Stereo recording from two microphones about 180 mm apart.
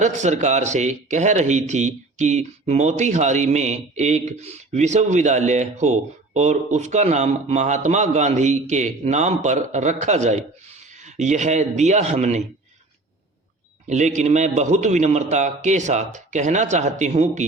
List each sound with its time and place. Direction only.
0.0 s speech: 40° right (ahead or behind)
13.8 s speech: 40° right (ahead or behind)